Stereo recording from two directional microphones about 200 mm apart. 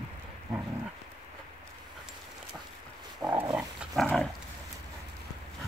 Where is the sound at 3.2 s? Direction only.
10° right (ahead or behind).